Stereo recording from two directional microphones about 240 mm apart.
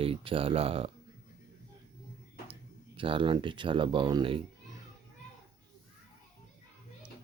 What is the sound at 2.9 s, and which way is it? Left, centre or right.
Speech, right.